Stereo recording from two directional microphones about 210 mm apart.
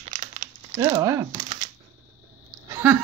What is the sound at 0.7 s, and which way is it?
Speech, 15° right (ahead or behind).